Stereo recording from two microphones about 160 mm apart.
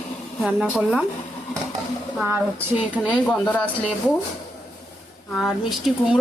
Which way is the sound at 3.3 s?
5° left (ahead or behind).